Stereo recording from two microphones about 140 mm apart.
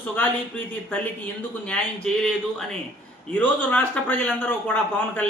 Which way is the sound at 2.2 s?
5° left (ahead or behind).